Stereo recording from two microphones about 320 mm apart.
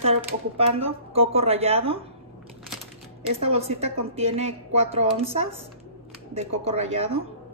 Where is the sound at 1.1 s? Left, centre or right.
Centre.